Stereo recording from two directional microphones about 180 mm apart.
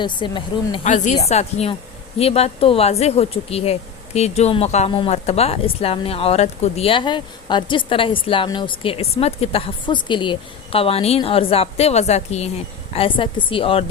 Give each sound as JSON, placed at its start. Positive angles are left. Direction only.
{"t": 0.0, "sound": "speech", "side_deg": 25}
{"t": 0.9, "sound": "speech", "side_deg": 40}